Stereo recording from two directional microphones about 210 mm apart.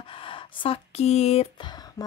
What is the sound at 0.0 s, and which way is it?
A woman's voice, 25° left (ahead or behind).